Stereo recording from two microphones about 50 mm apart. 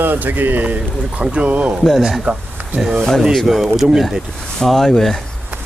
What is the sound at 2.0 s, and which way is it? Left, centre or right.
Speech, centre.